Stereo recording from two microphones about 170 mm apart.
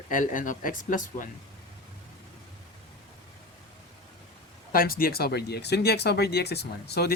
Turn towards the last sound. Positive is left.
turn(degrees=70)  # may be behind; listen again after turning